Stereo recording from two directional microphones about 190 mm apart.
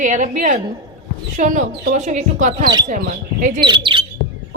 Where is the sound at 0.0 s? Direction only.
40° right (ahead or behind).